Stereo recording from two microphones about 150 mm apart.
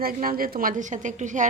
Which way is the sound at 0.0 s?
75° right (ahead or behind).